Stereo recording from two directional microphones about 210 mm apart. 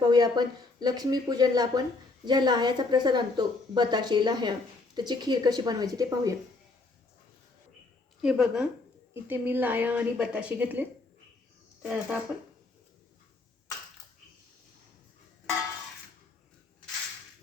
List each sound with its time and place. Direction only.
0.1 s speech: 20° right (ahead or behind)
8.2 s a woman's voice: centre (ahead or behind)